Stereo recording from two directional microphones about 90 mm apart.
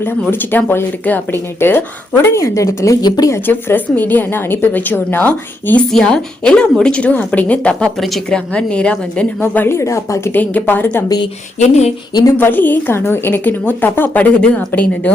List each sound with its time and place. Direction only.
0.0 s speech: 25° left (ahead or behind)
3.2 s speech: 25° left (ahead or behind)
5.9 s a woman's voice: 5° left (ahead or behind)
8.5 s a woman's voice: 10° left (ahead or behind)
9.4 s speech: 25° left (ahead or behind)
10.4 s speech: 20° left (ahead or behind)
12.4 s a woman's voice: 20° left (ahead or behind)